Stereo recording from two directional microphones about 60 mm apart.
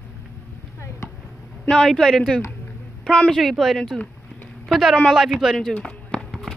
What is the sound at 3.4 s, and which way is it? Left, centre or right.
Speech, centre.